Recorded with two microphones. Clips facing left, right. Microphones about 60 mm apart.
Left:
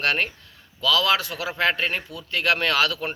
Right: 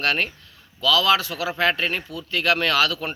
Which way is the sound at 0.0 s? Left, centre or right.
Left.